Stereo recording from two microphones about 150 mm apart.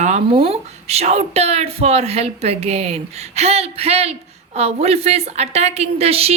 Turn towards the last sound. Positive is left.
turn(degrees=-40)  # may be behind; listen again after turning